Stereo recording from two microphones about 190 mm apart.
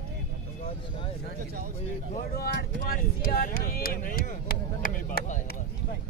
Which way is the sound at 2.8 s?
50° left (ahead or behind).